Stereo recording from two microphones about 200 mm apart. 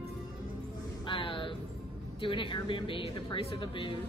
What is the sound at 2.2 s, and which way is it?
A woman's voice, 25° left (ahead or behind).